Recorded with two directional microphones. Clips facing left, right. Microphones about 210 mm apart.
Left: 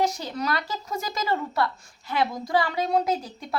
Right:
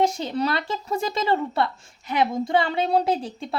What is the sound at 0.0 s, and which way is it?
Speech, 25° right (ahead or behind).